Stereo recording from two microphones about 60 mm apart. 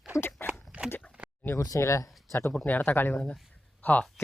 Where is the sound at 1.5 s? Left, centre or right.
Left.